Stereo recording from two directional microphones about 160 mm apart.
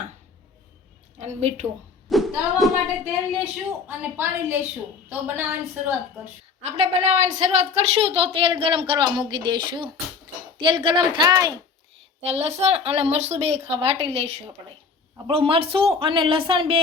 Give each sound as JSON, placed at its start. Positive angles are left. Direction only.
{"t": 1.2, "sound": "a woman's voice", "side_deg": -45}
{"t": 2.0, "sound": "speech", "side_deg": 0}
{"t": 3.8, "sound": "a woman's voice", "side_deg": -10}
{"t": 6.6, "sound": "a woman's voice", "side_deg": -45}
{"t": 12.2, "sound": "a woman's voice", "side_deg": -40}